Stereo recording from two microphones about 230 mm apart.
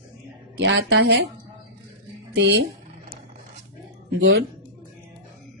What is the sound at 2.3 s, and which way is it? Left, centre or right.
Speech, right.